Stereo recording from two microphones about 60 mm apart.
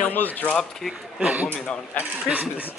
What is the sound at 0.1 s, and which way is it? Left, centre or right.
Speech, left.